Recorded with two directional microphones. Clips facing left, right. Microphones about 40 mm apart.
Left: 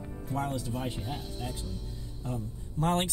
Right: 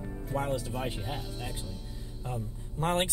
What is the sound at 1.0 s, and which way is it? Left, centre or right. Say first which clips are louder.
Speech: even; centre.